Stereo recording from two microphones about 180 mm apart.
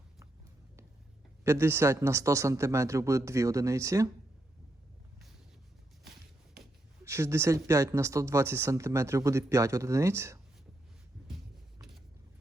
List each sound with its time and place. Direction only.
1.5 s speech: 15° right (ahead or behind)
7.0 s speech: 15° right (ahead or behind)